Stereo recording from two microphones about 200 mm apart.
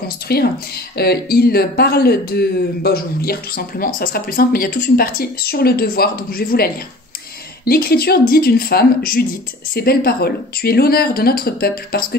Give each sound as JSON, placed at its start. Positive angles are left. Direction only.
{"t": 0.3, "sound": "speech", "side_deg": 50}